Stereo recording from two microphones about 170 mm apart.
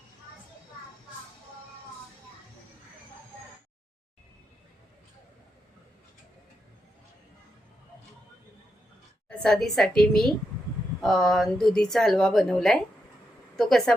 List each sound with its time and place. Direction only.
9.4 s a woman's voice: centre (ahead or behind)